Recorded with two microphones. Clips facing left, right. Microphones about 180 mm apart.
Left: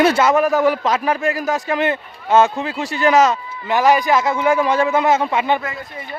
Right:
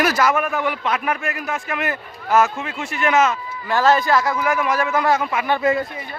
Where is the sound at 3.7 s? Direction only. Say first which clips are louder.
Left 2 dB; 15° left (ahead or behind).